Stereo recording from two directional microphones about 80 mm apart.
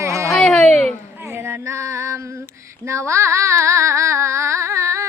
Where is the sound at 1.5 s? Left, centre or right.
Right.